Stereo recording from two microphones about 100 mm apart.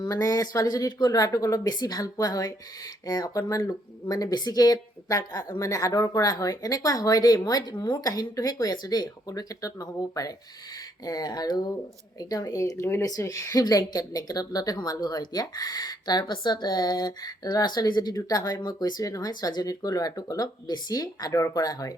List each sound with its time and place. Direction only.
0.0 s speech: 35° left (ahead or behind)
4.2 s speech: 40° left (ahead or behind)